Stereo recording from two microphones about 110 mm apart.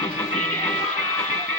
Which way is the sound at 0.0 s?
15° left (ahead or behind).